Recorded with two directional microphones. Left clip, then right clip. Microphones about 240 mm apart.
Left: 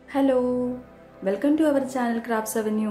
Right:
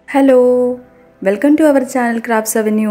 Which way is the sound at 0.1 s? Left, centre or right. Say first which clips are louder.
Right 12 dB; right.